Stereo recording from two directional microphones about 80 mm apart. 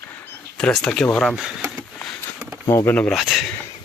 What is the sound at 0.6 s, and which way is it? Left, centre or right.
Speech, centre.